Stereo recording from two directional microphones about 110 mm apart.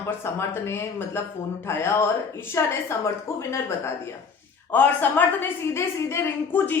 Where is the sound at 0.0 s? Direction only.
25° left (ahead or behind).